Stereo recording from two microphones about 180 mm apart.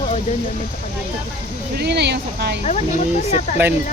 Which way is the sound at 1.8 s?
65° right (ahead or behind).